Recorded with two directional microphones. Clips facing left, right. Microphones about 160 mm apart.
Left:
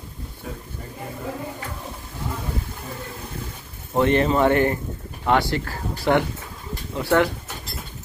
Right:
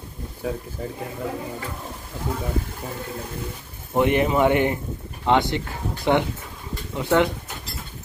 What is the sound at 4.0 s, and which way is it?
Speech, 15° right (ahead or behind).